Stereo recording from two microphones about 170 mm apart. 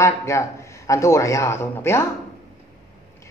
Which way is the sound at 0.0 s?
15° left (ahead or behind).